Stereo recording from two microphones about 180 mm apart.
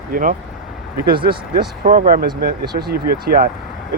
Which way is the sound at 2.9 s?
55° right (ahead or behind).